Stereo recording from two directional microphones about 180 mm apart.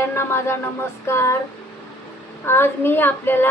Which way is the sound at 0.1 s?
15° left (ahead or behind).